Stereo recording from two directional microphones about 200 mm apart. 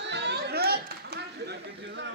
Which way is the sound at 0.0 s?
60° right (ahead or behind).